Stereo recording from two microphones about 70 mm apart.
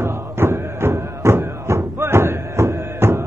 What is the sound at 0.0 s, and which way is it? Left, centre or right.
Music, right.